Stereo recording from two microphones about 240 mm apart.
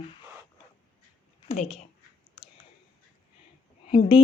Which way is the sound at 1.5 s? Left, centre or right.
Left.